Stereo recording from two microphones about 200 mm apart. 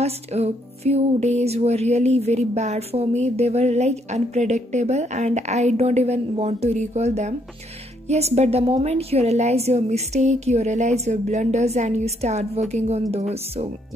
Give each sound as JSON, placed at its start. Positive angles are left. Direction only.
{"t": 0.0, "sound": "music", "side_deg": -30}